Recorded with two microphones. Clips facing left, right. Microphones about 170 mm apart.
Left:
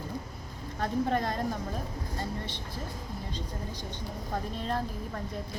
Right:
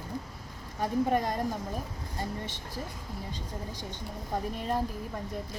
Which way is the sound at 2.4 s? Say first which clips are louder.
Left 1 dB; 45° right (ahead or behind).